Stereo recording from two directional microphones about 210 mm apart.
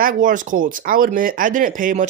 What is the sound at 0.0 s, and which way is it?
Speech, 40° right (ahead or behind).